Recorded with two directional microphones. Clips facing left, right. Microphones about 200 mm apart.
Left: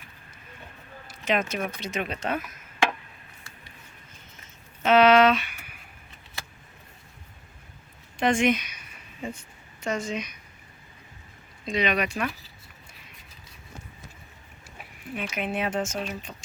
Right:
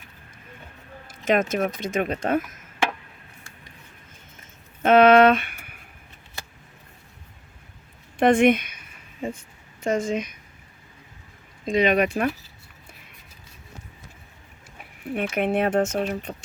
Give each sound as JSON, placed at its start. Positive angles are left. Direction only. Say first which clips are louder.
{"t": 1.0, "sound": "speech", "louder": "right 5 dB", "side_deg": -50}
{"t": 4.8, "sound": "a sound", "louder": "right 4 dB", "side_deg": -50}
{"t": 8.2, "sound": "speech", "louder": "right 6 dB", "side_deg": -55}
{"t": 9.8, "sound": "speech", "louder": "right 6 dB", "side_deg": -50}
{"t": 11.6, "sound": "speech", "louder": "right 6 dB", "side_deg": -45}
{"t": 15.1, "sound": "speech", "louder": "right 7 dB", "side_deg": -60}